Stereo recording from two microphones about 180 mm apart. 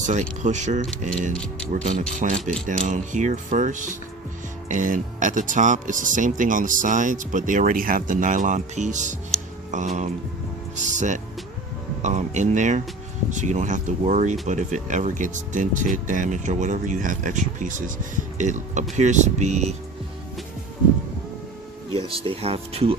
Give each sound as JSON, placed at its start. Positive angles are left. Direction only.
{"t": 0.0, "sound": "speech", "side_deg": -40}
{"t": 1.3, "sound": "speech", "side_deg": 5}
{"t": 1.7, "sound": "speech", "side_deg": -45}
{"t": 2.4, "sound": "speech", "side_deg": 5}
{"t": 2.6, "sound": "speech", "side_deg": -45}
{"t": 21.9, "sound": "speech", "side_deg": -30}